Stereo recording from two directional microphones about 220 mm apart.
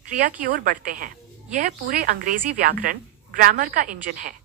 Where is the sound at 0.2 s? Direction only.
40° right (ahead or behind).